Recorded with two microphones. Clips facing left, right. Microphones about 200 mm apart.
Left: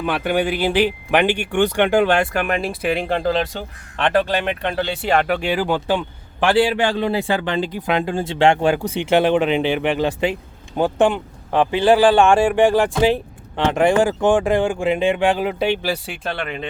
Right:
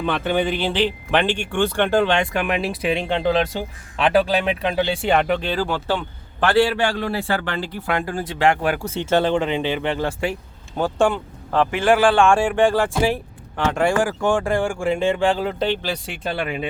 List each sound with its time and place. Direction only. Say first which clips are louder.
0.0 s speech: left 1 dB; 10° left (ahead or behind)
5.4 s speech: left 3 dB; 15° left (ahead or behind); by 16.6 s 5° right (ahead or behind)